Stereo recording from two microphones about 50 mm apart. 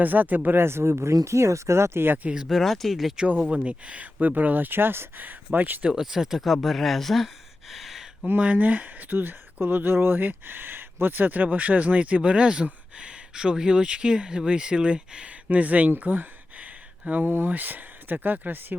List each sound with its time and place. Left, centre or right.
0.0 s speech: right
0.6 s speech: right
1.2 s speech: right
2.5 s speech: centre
3.5 s speech: right
5.9 s speech: centre
7.7 s a sound: centre
8.4 s speech: right
15.3 s speech: right
16.0 s a sound: right
17.2 s speech: right
17.5 s speech: right